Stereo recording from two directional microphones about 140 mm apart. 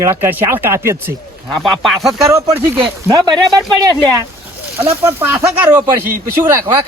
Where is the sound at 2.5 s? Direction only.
35° right (ahead or behind).